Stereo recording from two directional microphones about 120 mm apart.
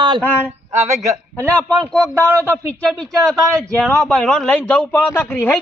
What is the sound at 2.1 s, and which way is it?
Speech, 20° right (ahead or behind).